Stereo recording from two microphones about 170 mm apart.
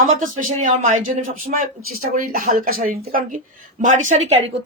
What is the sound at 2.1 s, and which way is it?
A woman's voice, 55° right (ahead or behind).